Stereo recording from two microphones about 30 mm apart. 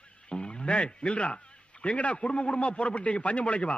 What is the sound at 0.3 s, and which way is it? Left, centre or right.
Radio, left.